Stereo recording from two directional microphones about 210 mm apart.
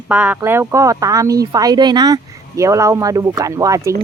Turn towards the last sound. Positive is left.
turn(degrees=-15)  # may be behind; listen again after turning